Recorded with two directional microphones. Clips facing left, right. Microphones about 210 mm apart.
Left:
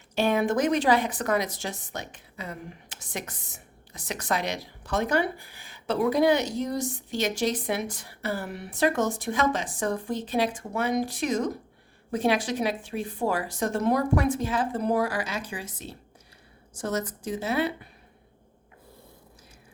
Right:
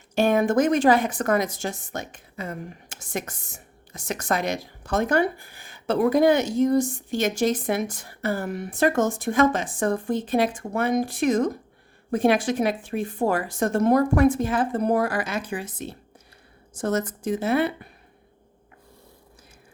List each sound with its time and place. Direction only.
0.2 s speech: 50° right (ahead or behind)